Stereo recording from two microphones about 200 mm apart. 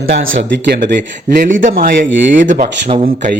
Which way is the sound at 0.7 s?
45° right (ahead or behind).